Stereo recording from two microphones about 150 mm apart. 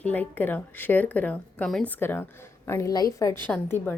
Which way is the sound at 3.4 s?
10° left (ahead or behind).